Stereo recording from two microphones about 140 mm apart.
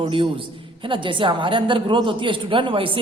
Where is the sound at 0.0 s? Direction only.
40° right (ahead or behind).